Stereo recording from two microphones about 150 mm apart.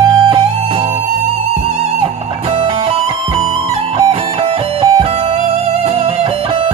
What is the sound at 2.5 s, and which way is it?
Music, 40° right (ahead or behind).